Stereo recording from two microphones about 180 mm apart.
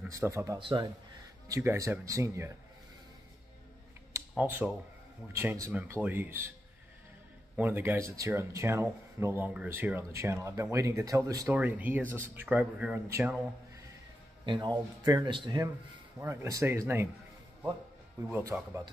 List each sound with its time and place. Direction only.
0.1 s speech: 15° right (ahead or behind)
0.6 s speech: 25° right (ahead or behind)
1.5 s speech: 15° right (ahead or behind)
4.4 s speech: 10° right (ahead or behind)
7.5 s speech: 10° right (ahead or behind)
14.4 s speech: 25° right (ahead or behind)
18.3 s speech: 15° right (ahead or behind)